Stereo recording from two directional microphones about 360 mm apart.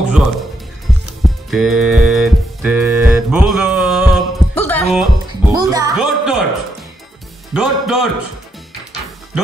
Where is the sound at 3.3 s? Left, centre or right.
Centre.